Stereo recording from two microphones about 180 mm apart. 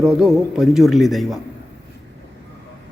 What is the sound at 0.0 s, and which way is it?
A man's voice, centre (ahead or behind).